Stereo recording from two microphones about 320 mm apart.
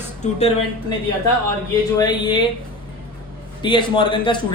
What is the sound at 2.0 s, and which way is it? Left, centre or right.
Speech, centre.